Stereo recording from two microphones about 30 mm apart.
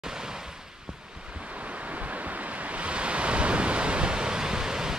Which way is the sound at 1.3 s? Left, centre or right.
Right.